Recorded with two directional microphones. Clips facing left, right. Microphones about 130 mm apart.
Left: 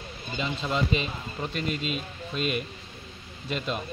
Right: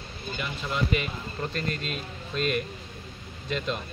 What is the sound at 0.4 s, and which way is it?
A man's voice, 25° left (ahead or behind).